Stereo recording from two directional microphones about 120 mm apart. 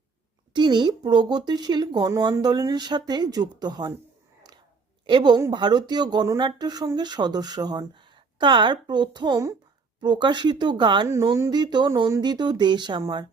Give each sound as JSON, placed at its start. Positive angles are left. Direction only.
{"t": 0.5, "sound": "speech", "side_deg": -40}
{"t": 5.0, "sound": "speech", "side_deg": -40}